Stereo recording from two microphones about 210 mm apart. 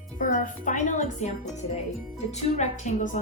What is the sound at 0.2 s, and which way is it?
Speech, 35° left (ahead or behind).